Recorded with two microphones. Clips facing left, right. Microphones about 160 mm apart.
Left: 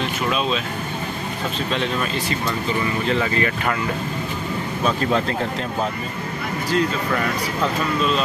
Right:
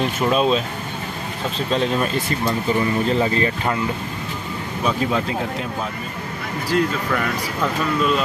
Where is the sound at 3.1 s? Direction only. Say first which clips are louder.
Right 2 dB; 25° right (ahead or behind).